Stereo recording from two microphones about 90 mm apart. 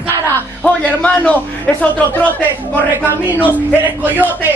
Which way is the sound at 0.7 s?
15° left (ahead or behind).